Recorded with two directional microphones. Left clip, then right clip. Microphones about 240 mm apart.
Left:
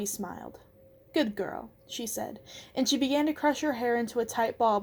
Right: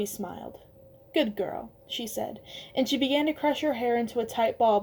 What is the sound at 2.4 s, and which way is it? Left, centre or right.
Speech, left.